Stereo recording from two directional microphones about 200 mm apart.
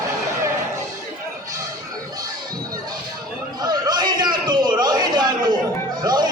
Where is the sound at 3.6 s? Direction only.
20° right (ahead or behind).